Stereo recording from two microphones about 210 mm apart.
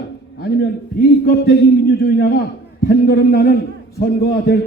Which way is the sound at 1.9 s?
45° left (ahead or behind).